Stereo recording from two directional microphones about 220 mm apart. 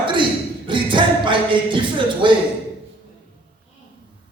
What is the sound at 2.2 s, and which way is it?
Speech, 20° right (ahead or behind).